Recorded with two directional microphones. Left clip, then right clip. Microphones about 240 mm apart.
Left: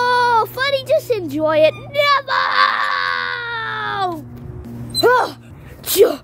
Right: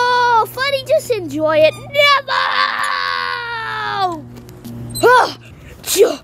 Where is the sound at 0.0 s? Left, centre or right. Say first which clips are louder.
Right 2 dB; centre.